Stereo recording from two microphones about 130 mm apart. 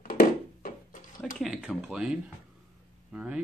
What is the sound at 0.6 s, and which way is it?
Drawer open or close, 85° left.